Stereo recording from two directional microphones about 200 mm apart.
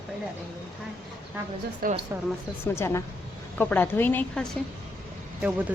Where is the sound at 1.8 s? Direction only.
45° right (ahead or behind).